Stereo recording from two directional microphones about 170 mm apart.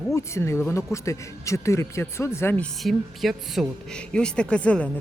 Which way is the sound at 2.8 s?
Centre (ahead or behind).